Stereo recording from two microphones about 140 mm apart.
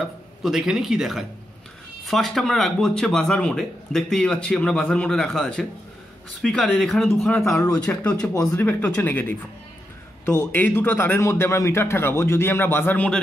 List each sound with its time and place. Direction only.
0.0 s a man's voice: centre (ahead or behind)
7.1 s a man's voice: 15° left (ahead or behind)